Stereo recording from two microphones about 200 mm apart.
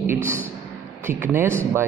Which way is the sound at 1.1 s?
10° right (ahead or behind).